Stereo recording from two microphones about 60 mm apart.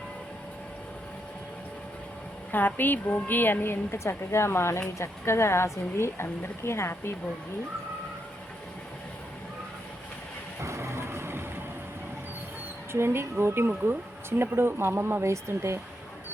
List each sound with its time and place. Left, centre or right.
2.5 s a woman's voice: left
10.6 s vehicle: right
12.9 s speech: right
15.3 s speech: right